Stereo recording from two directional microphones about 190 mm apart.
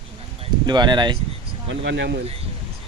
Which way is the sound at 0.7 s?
25° right (ahead or behind).